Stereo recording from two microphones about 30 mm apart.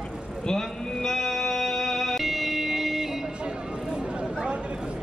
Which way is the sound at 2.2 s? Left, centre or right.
Centre.